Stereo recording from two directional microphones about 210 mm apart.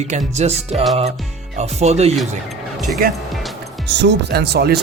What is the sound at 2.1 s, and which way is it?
Speech, centre (ahead or behind).